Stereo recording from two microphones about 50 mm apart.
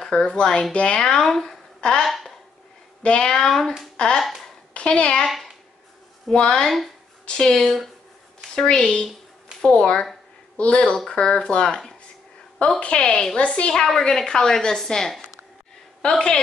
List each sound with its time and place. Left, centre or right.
0.0 s speech: centre
1.2 s speech: centre
1.8 s a sound: centre
3.0 s a child's voice: left
5.2 s a child's voice: centre
12.8 s speech: centre
13.4 s a woman's voice: left